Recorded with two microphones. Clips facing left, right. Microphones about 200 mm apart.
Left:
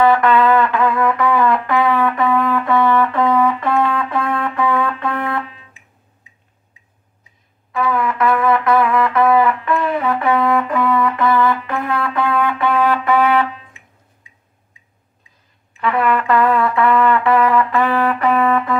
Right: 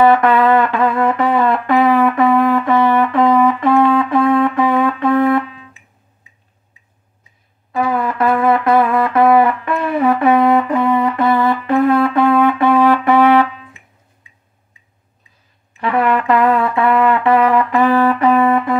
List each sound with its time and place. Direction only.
0.0 s music: 25° right (ahead or behind)
7.7 s music: 35° right (ahead or behind)
15.8 s brass instrument: 25° right (ahead or behind)
17.2 s music: 25° right (ahead or behind)